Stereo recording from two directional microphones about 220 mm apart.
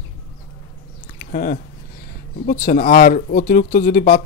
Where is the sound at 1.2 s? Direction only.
40° left (ahead or behind).